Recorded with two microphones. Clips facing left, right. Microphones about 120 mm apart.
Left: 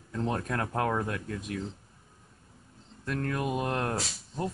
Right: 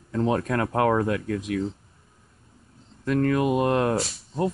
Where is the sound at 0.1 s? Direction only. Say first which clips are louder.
Right 7 dB; 90° right.